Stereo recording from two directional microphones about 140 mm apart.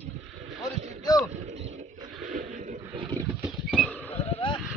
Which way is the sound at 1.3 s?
55° right (ahead or behind).